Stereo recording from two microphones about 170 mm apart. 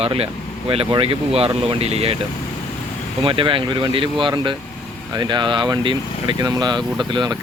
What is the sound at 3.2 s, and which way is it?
Speech, 30° right (ahead or behind).